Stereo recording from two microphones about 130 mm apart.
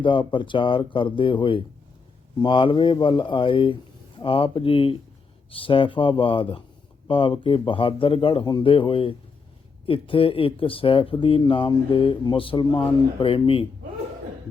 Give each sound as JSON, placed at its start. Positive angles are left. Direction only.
{"t": 0.0, "sound": "speech", "side_deg": 40}